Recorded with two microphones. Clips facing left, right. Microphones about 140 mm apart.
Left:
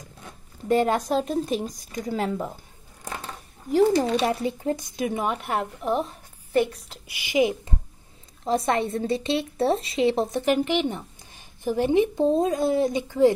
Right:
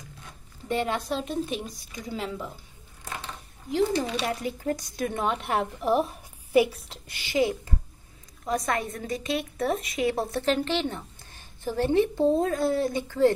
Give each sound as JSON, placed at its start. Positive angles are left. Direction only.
{"t": 0.2, "sound": "speech", "side_deg": 40}
{"t": 3.7, "sound": "speech", "side_deg": 45}
{"t": 4.3, "sound": "a woman's voice", "side_deg": 25}
{"t": 7.1, "sound": "a woman's voice", "side_deg": 15}
{"t": 8.5, "sound": "a woman's voice", "side_deg": 30}